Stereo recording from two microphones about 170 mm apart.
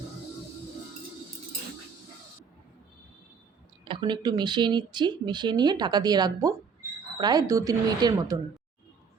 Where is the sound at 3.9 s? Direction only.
25° right (ahead or behind).